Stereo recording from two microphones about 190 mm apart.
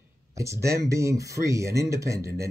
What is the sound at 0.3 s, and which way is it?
Speech, 15° right (ahead or behind).